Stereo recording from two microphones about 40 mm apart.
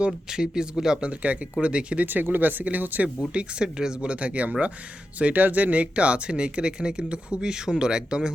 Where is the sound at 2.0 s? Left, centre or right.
Right.